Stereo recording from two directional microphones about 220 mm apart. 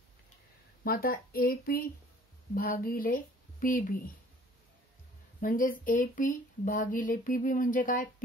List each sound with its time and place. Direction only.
0.8 s speech: 40° left (ahead or behind)
5.4 s speech: 40° left (ahead or behind)